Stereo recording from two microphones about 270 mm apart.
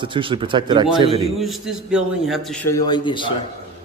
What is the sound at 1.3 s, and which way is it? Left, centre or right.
A man's voice, centre.